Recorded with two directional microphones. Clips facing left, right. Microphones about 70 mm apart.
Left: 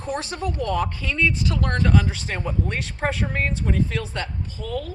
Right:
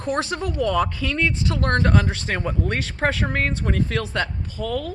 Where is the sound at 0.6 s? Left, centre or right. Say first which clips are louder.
Right 4 dB; right.